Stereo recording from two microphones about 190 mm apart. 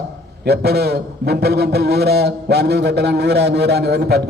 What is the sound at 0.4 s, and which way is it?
A man's voice, 60° right (ahead or behind).